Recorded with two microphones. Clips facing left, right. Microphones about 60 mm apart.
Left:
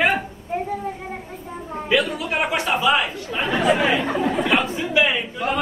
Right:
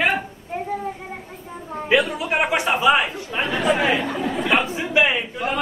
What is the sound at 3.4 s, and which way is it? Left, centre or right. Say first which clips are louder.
A woman's voice: left 1 dB; centre.